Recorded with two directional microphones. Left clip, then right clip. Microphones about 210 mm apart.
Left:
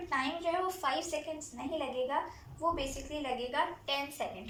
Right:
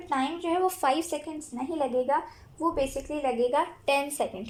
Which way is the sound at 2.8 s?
55° right (ahead or behind).